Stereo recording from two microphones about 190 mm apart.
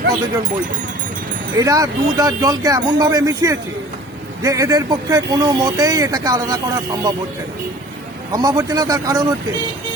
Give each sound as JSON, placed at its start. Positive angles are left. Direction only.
{"t": 1.5, "sound": "speech", "side_deg": -20}
{"t": 8.3, "sound": "speech", "side_deg": -20}